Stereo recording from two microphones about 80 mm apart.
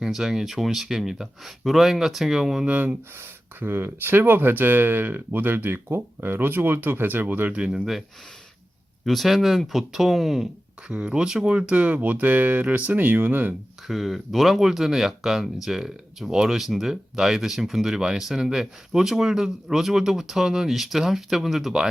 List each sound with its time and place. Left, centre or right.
0.0 s speech: centre
3.2 s speech: right
9.0 s speech: centre; by 13.5 s right
13.8 s speech: centre